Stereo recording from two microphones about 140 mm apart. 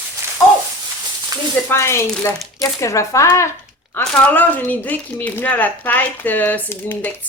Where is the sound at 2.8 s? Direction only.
20° left (ahead or behind).